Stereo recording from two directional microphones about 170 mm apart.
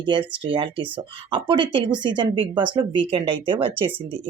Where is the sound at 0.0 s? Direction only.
30° right (ahead or behind).